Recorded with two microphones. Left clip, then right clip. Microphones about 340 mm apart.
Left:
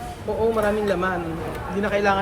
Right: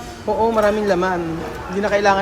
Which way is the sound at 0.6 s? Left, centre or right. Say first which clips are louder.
Right 5 dB; centre.